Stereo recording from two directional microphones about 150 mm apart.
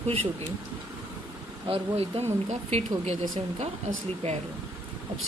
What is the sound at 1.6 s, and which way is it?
Speech, 40° right (ahead or behind).